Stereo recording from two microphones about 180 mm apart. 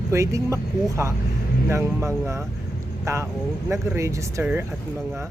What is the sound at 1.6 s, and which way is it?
Speech, 15° right (ahead or behind).